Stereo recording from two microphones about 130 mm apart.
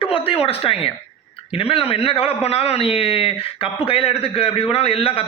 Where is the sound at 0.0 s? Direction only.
45° left (ahead or behind).